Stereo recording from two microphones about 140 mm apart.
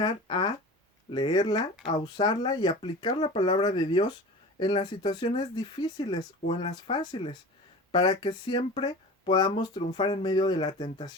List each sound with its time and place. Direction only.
0.0 s speech: 35° left (ahead or behind)